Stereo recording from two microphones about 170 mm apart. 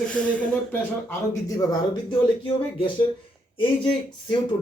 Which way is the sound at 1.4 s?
20° left (ahead or behind).